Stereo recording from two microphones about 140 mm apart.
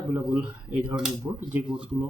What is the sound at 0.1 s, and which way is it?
Speech, 10° right (ahead or behind).